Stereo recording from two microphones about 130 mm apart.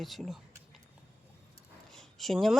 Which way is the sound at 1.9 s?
5° left (ahead or behind).